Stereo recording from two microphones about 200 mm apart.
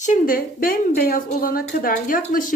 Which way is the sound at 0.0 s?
40° left (ahead or behind).